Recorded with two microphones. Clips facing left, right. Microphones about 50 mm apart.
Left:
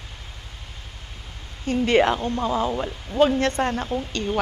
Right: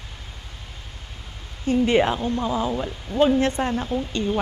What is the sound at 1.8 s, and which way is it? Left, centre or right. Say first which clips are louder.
Speech: left 2 dB; left.